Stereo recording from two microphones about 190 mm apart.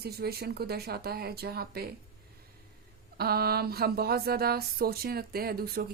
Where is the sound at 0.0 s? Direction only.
55° right (ahead or behind).